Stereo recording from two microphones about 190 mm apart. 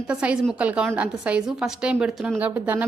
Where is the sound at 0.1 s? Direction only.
5° right (ahead or behind).